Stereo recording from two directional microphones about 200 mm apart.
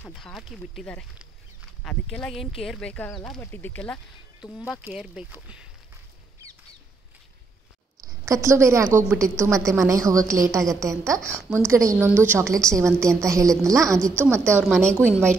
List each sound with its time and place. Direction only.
0.1 s speech: centre (ahead or behind)
8.0 s a woman's voice: 15° right (ahead or behind)
14.6 s speech: 5° left (ahead or behind)